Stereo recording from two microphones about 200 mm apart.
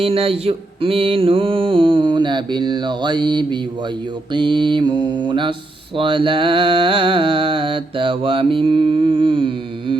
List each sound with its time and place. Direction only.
0.0 s mantra: 30° right (ahead or behind)